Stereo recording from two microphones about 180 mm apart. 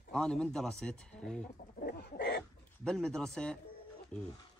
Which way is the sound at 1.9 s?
65° left (ahead or behind).